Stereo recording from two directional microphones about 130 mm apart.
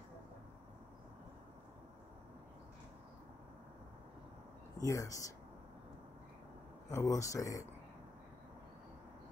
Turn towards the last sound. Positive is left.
turn(degrees=25)  # may be behind; listen again after turning